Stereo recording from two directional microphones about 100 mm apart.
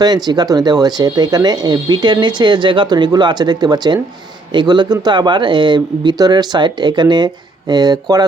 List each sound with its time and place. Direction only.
0.0 s speech: 45° right (ahead or behind)